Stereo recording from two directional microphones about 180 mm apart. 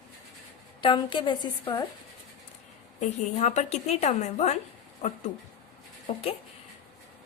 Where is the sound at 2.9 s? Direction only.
40° left (ahead or behind).